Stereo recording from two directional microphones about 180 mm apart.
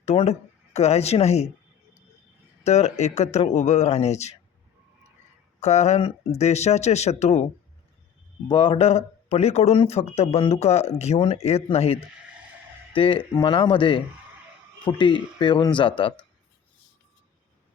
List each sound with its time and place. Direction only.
0.0 s speech: 35° left (ahead or behind)
2.6 s speech: 40° left (ahead or behind)
5.5 s speech: 40° left (ahead or behind)
8.4 s speech: 25° left (ahead or behind)